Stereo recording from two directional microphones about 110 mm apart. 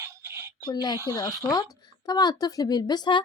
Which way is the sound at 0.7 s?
40° left (ahead or behind).